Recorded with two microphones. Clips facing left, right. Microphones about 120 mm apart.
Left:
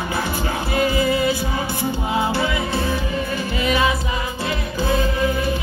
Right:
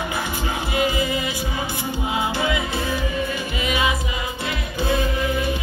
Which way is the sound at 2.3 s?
40° left (ahead or behind).